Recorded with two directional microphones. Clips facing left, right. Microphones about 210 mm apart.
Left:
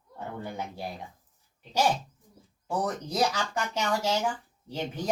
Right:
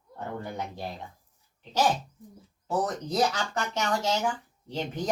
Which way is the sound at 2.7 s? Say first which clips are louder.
Right 2 dB; 10° left (ahead or behind).